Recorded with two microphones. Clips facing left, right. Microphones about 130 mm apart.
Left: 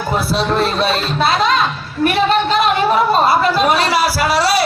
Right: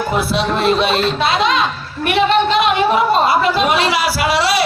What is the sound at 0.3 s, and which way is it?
Speech, 35° left (ahead or behind).